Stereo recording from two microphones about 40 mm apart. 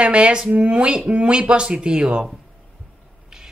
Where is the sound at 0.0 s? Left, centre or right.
Right.